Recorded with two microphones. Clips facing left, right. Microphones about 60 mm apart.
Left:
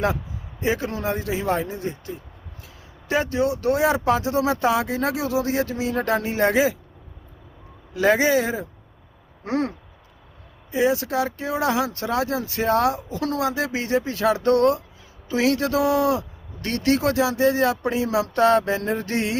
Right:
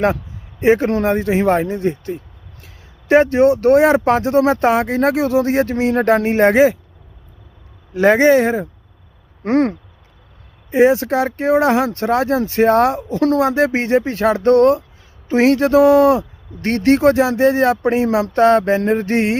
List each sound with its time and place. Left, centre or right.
0.6 s speech: right
7.9 s speech: right